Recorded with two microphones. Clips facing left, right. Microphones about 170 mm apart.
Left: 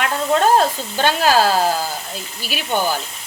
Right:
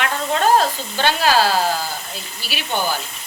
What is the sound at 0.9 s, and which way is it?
Speech, 45° left (ahead or behind).